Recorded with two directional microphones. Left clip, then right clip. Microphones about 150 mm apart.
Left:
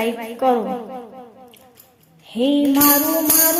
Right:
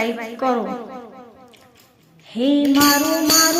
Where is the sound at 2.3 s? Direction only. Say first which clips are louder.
Even; 40° left (ahead or behind).